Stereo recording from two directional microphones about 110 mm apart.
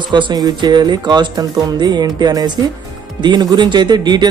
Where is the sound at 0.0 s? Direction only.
45° right (ahead or behind).